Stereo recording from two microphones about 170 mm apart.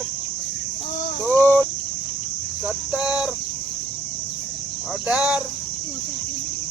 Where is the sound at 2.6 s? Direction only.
5° right (ahead or behind).